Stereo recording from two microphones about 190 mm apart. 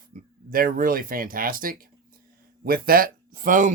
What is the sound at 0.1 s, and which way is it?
Speech, 50° right (ahead or behind).